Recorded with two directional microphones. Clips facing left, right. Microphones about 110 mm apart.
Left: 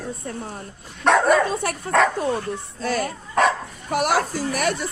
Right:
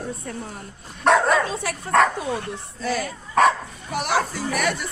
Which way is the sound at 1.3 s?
55° left (ahead or behind).